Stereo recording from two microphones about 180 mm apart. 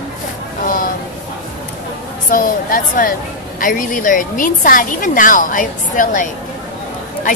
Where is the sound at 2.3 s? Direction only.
50° left (ahead or behind).